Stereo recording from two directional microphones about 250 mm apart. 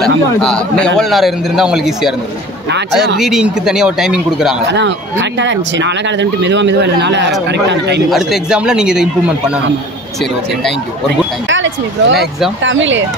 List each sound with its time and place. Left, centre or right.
0.0 s a man's voice: centre
4.7 s speech: right
8.1 s a man's voice: centre
11.4 s speech: right